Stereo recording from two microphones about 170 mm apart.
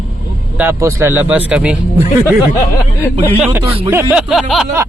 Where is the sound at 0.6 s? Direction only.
15° right (ahead or behind).